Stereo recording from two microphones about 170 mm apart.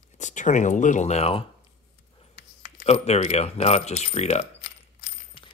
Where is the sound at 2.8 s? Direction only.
40° left (ahead or behind).